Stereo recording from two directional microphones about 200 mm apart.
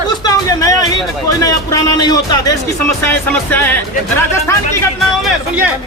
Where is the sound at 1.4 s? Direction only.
15° left (ahead or behind).